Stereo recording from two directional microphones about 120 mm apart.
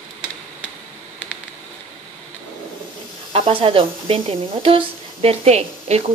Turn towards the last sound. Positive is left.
turn(degrees=-60)  # may be behind; listen again after turning